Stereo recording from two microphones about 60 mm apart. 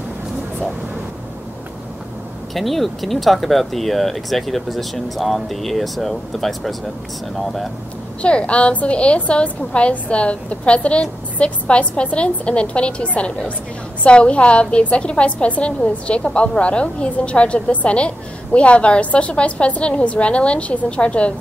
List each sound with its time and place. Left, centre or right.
2.5 s speech: centre
8.2 s a woman's voice: centre